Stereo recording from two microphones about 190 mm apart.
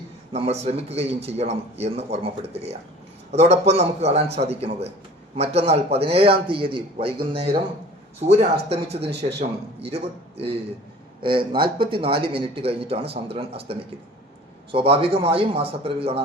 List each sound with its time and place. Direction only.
0.3 s a man's voice: 35° right (ahead or behind)